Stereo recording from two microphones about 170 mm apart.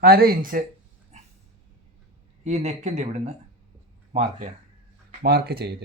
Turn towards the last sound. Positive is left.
turn(degrees=-70)  # may be behind; listen again after turning